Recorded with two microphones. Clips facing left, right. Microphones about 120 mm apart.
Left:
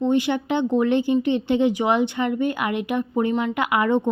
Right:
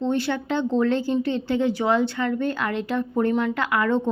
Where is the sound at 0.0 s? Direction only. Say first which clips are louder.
Left 3 dB; 15° left (ahead or behind).